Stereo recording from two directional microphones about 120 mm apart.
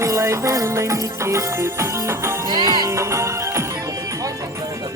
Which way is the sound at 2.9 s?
25° right (ahead or behind).